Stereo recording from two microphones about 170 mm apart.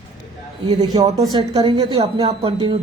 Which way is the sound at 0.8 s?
25° right (ahead or behind).